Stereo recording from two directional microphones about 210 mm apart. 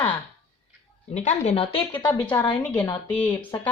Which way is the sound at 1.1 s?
35° left (ahead or behind).